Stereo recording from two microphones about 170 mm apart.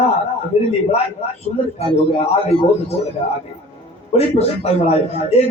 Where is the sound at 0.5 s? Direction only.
40° left (ahead or behind).